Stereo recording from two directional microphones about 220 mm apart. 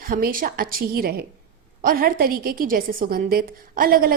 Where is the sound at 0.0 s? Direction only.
40° right (ahead or behind).